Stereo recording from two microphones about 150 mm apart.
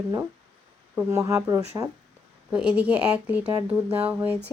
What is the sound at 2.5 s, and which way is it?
A woman's voice, 10° right (ahead or behind).